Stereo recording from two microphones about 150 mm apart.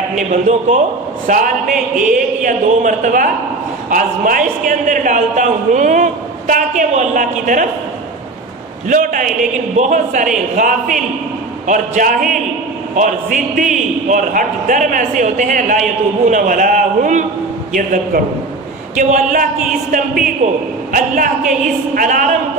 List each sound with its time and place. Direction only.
0.1 s a man's voice: 50° right (ahead or behind)
8.8 s a man's voice: 60° right (ahead or behind)
20.9 s a man's voice: 65° right (ahead or behind)